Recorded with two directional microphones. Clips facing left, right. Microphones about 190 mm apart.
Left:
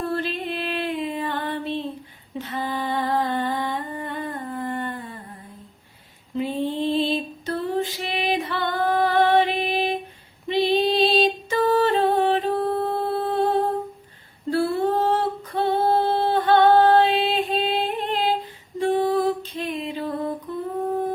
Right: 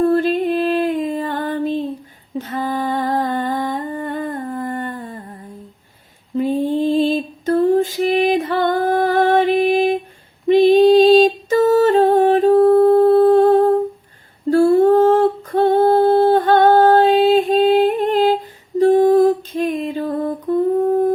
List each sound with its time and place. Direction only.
0.0 s music: 45° right (ahead or behind)
2.4 s humming: 45° right (ahead or behind)
6.3 s female singing: 45° right (ahead or behind)
10.5 s a sound: 50° right (ahead or behind)
14.5 s humming: 45° right (ahead or behind)